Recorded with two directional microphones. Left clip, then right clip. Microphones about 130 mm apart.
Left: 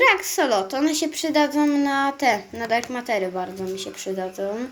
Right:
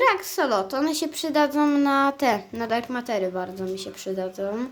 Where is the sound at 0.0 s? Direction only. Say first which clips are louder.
Left 3 dB; 45° right (ahead or behind).